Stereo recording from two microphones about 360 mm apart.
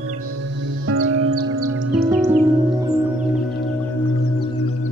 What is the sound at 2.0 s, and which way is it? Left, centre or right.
Music, centre.